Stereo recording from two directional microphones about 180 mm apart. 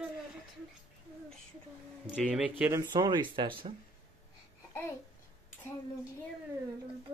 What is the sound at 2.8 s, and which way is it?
Speech, 25° right (ahead or behind).